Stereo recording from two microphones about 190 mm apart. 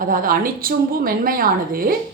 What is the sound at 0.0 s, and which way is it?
A woman's voice, 50° right (ahead or behind).